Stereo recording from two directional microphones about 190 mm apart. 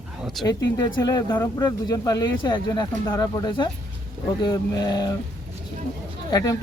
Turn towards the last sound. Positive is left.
turn(degrees=20)  # may be behind; listen again after turning